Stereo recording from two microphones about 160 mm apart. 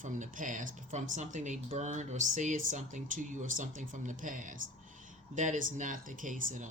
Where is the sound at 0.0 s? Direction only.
50° right (ahead or behind).